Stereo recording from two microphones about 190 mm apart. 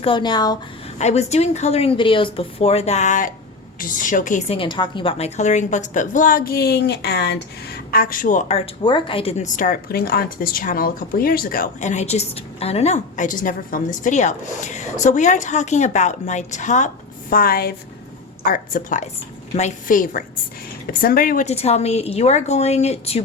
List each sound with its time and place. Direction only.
0.0 s speech: 25° left (ahead or behind)
0.9 s a woman's voice: 35° left (ahead or behind)
9.6 s a woman's voice: 50° left (ahead or behind); by 23.2 s 35° left (ahead or behind)